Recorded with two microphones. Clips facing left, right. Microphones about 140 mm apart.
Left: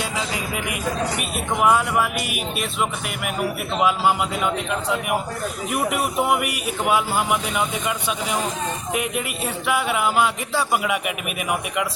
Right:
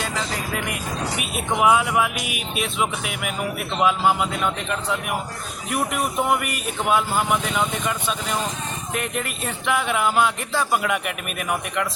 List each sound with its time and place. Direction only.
1.2 s speech: centre (ahead or behind)
3.8 s speech: 5° left (ahead or behind)
5.7 s speech: 5° left (ahead or behind)